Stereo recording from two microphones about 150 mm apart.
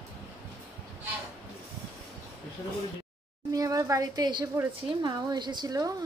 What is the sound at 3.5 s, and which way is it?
A woman's voice, 25° right (ahead or behind).